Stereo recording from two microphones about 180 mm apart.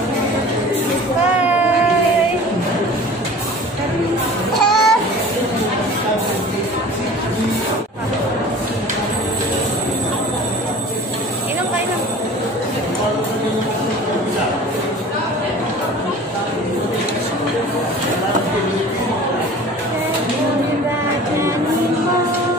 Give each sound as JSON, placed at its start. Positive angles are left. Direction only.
{"t": 4.6, "sound": "babbling", "side_deg": 0}